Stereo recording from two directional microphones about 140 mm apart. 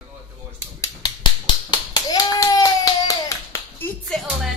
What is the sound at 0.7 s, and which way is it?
Clapping, 30° left (ahead or behind).